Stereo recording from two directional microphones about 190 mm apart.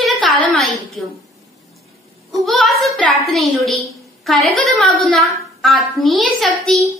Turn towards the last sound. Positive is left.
turn(degrees=0)  # may be behind; listen again after turning